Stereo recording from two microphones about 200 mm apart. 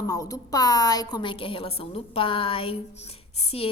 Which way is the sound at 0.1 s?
15° left (ahead or behind).